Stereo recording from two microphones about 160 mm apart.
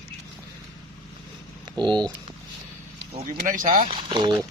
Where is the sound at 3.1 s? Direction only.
40° right (ahead or behind).